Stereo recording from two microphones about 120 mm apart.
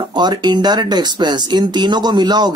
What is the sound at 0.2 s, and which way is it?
Speech, 35° right (ahead or behind).